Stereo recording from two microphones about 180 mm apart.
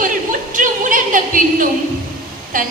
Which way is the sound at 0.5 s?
50° right (ahead or behind).